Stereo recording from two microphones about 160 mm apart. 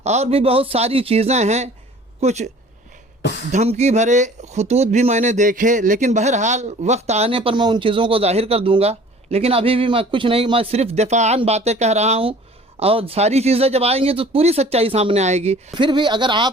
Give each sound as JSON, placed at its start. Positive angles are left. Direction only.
{"t": 0.0, "sound": "speech", "side_deg": -45}
{"t": 3.5, "sound": "speech", "side_deg": -45}
{"t": 15.8, "sound": "speech", "side_deg": -30}